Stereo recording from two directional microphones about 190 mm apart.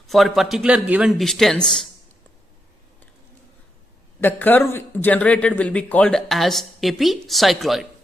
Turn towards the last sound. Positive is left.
turn(degrees=0)  # may be behind; listen again after turning